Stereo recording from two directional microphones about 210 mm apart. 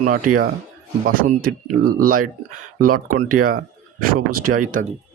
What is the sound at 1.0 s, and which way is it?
Speech, 45° right (ahead or behind).